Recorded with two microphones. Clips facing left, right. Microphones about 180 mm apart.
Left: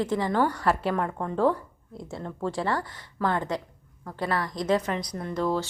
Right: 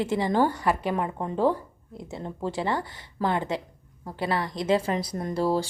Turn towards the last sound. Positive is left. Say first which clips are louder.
# right 2 dB
turn(degrees=-35)  # may be behind; listen again after turning